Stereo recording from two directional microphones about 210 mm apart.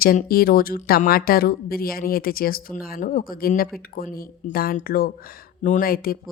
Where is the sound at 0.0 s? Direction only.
45° left (ahead or behind).